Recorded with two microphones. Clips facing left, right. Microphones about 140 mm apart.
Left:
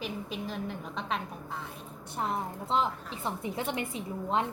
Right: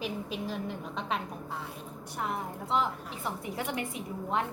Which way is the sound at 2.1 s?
30° left (ahead or behind).